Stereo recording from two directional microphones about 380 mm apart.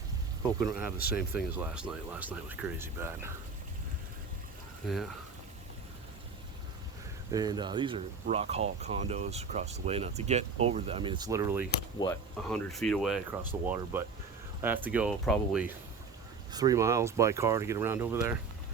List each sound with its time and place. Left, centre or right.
0.6 s speech: centre
4.8 s speech: centre
7.3 s speech: centre
11.9 s speech: centre